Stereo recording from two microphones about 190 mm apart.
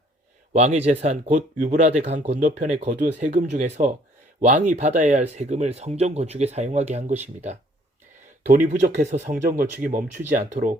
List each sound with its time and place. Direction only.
0.5 s speech: 35° right (ahead or behind)